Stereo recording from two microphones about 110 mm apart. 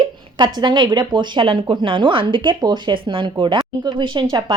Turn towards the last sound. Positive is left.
turn(degrees=-40)  # may be behind; listen again after turning